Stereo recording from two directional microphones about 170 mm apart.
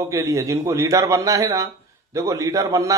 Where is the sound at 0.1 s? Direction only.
20° right (ahead or behind).